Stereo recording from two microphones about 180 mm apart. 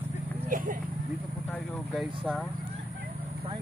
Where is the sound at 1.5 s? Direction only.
Centre (ahead or behind).